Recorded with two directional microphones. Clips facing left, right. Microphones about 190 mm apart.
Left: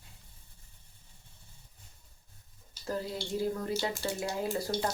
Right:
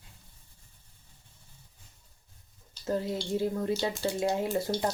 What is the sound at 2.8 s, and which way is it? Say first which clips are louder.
Speech: right 5 dB; 25° right (ahead or behind).